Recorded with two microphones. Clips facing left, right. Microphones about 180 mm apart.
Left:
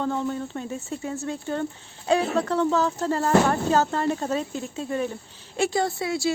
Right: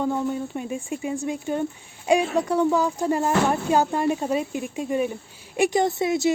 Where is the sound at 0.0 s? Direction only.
10° right (ahead or behind).